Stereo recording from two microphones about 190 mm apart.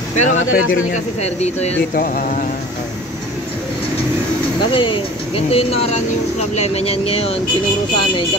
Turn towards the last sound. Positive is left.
turn(degrees=30)  # may be behind; listen again after turning